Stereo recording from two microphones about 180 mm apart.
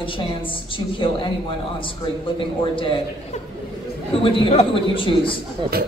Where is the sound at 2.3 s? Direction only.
30° left (ahead or behind).